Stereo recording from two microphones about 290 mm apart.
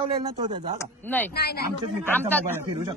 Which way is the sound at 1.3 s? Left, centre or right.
Left.